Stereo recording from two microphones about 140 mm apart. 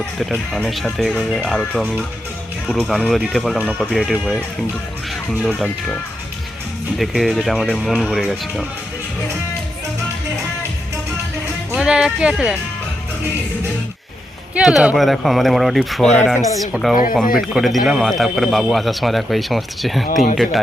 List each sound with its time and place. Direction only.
0.2 s speech: centre (ahead or behind)
7.0 s speech: centre (ahead or behind)
11.7 s speech: 5° right (ahead or behind)
14.5 s speech: 5° right (ahead or behind)
16.9 s speech: 80° left
17.5 s speech: centre (ahead or behind)